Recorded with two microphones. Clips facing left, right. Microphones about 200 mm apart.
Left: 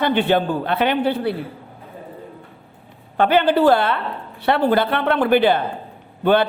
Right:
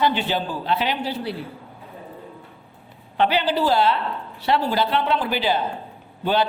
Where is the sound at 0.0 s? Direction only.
55° left (ahead or behind).